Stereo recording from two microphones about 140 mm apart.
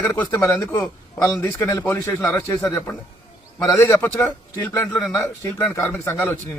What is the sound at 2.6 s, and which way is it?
Speech, centre (ahead or behind).